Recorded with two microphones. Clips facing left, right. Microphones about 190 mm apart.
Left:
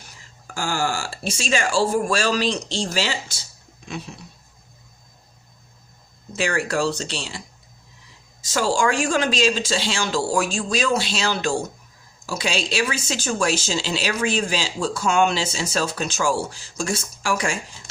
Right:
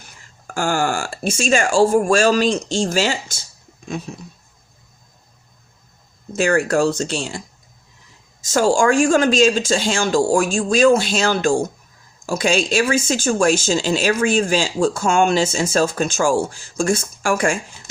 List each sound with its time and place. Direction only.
0.5 s speech: 55° right (ahead or behind)
3.8 s a sound: 45° right (ahead or behind)
6.3 s speech: 45° right (ahead or behind)